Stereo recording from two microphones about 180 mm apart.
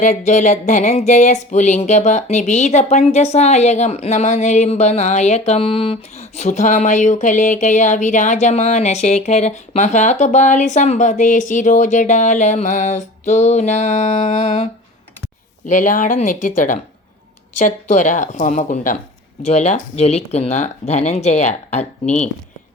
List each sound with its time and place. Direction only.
0.0 s speech: 45° left (ahead or behind)